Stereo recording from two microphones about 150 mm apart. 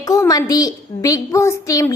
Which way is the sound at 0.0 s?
20° left (ahead or behind).